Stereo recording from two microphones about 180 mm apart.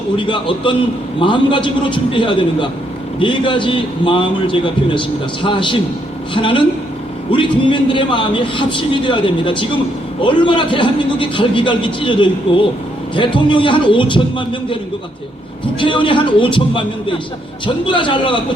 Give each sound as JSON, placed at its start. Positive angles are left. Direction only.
{"t": 0.2, "sound": "a man's voice", "side_deg": 25}
{"t": 15.8, "sound": "a man's voice", "side_deg": 25}